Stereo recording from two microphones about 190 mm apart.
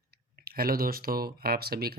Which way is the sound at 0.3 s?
50° right (ahead or behind).